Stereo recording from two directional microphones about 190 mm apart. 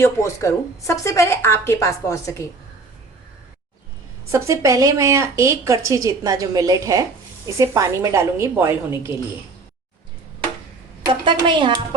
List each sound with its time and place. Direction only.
0.0 s speech: 15° left (ahead or behind)
4.3 s a woman's voice: 15° right (ahead or behind)
11.0 s a woman's voice: 25° right (ahead or behind)